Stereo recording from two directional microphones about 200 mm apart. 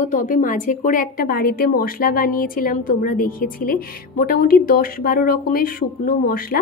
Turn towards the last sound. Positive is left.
turn(degrees=45)  # may be behind; listen again after turning